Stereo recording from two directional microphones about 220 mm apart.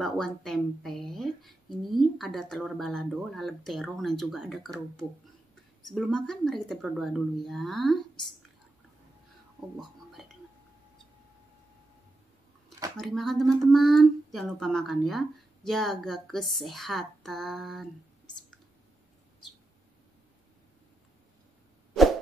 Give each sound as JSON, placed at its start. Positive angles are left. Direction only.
{"t": 0.0, "sound": "speech", "side_deg": 0}
{"t": 9.8, "sound": "whispering", "side_deg": 0}
{"t": 12.9, "sound": "speech", "side_deg": 0}